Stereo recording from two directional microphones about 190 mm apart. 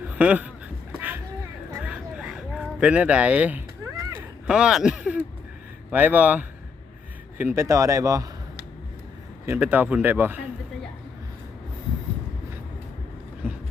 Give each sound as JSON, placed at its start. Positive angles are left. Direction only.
{"t": 0.2, "sound": "speech", "side_deg": -5}
{"t": 0.9, "sound": "boat", "side_deg": -10}
{"t": 1.8, "sound": "a sound", "side_deg": -5}
{"t": 5.9, "sound": "speech", "side_deg": -10}
{"t": 9.5, "sound": "speech", "side_deg": -10}
{"t": 13.4, "sound": "a sound", "side_deg": -10}